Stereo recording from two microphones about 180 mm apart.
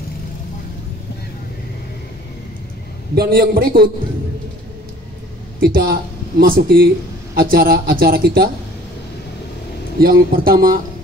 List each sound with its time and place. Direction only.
3.2 s a man's voice: 55° right (ahead or behind)
5.6 s a man's voice: 60° right (ahead or behind)
9.9 s a man's voice: 55° right (ahead or behind)